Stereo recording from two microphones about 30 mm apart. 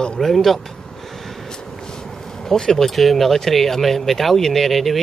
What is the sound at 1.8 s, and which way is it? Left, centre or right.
Vehicle, left.